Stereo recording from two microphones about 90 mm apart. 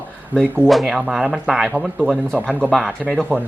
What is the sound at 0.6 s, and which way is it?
Speech, centre (ahead or behind).